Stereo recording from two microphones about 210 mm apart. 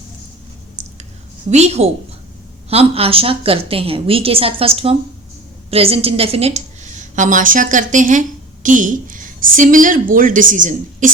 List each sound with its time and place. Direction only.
1.5 s a woman's voice: 30° right (ahead or behind)